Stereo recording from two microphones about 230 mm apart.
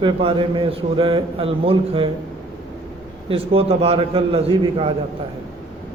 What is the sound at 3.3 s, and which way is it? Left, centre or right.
A man's voice, right.